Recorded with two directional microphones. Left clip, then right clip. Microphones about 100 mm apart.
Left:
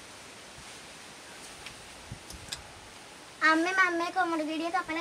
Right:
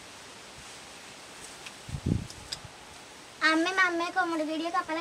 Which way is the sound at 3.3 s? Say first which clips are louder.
Left 1 dB; 20° right (ahead or behind).